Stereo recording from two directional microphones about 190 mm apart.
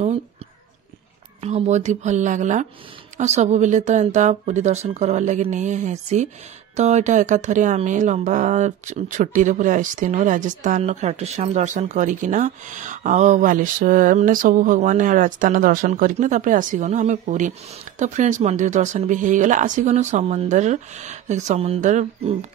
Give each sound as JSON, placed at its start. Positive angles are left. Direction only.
{"t": 1.4, "sound": "speech", "side_deg": -35}